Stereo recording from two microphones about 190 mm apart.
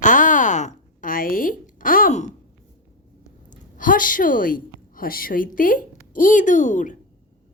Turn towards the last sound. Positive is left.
turn(degrees=40)  # may be behind; listen again after turning